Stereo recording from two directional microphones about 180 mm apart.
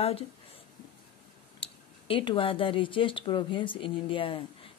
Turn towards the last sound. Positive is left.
turn(degrees=30)  # may be behind; listen again after turning